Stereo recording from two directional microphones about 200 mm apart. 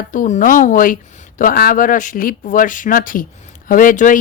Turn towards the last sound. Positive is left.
turn(degrees=40)  # may be behind; listen again after turning